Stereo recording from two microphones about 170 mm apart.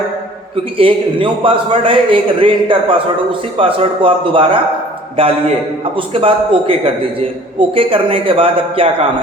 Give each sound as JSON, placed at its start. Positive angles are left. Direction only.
{"t": 0.5, "sound": "a man's voice", "side_deg": -30}
{"t": 7.8, "sound": "a man's voice", "side_deg": -30}